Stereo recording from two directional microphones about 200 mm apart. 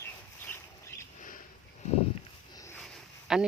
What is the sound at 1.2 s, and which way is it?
Sniff, 40° left (ahead or behind).